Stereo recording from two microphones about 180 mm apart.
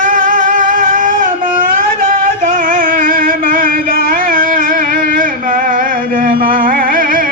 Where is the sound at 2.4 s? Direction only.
50° right (ahead or behind).